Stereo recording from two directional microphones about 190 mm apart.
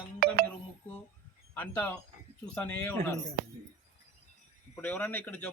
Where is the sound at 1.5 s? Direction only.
10° left (ahead or behind).